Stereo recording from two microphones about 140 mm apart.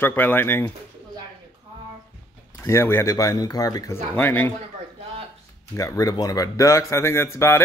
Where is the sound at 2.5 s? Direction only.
20° left (ahead or behind).